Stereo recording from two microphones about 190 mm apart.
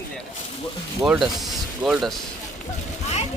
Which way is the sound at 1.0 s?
Centre (ahead or behind).